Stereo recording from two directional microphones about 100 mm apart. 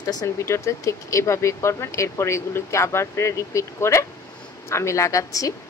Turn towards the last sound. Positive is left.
turn(degrees=35)  # may be behind; listen again after turning